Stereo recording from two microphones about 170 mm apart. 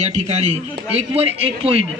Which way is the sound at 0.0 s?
40° right (ahead or behind).